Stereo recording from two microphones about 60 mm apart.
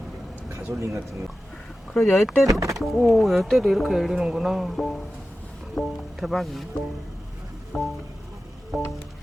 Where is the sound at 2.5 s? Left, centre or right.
Right.